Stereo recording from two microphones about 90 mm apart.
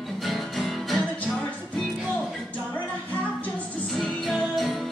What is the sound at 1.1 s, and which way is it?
Music, 15° left (ahead or behind).